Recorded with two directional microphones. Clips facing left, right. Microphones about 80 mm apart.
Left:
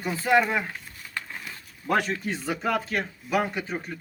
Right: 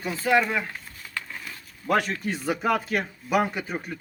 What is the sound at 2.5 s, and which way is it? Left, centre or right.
Speech, centre.